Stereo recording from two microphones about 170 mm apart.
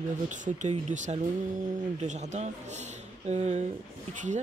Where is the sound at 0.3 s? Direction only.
45° right (ahead or behind).